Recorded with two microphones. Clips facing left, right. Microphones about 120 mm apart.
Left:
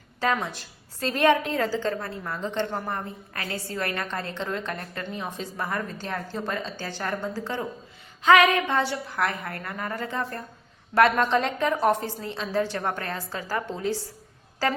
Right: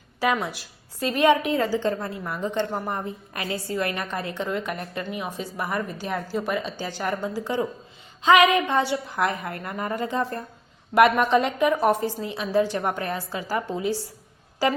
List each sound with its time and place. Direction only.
0.2 s a woman's voice: 10° right (ahead or behind)